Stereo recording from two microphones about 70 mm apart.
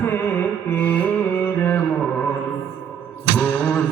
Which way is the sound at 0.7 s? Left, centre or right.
Left.